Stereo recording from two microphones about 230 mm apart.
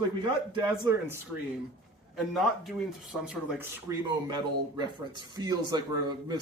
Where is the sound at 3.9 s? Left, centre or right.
Centre.